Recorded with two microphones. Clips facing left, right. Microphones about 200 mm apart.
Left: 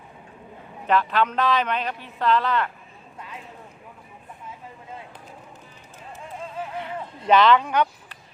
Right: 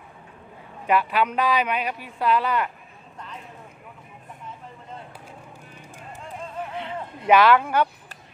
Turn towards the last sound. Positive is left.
turn(degrees=-10)  # may be behind; listen again after turning